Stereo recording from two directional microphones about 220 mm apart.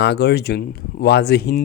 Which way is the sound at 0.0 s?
50° left (ahead or behind).